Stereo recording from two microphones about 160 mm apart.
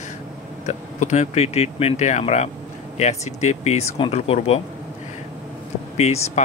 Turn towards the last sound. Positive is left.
turn(degrees=45)  # may be behind; listen again after turning